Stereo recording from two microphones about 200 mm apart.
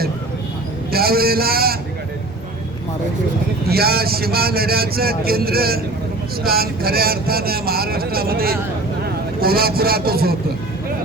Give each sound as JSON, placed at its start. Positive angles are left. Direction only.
{"t": 0.9, "sound": "speech", "side_deg": -50}
{"t": 3.7, "sound": "speech", "side_deg": -50}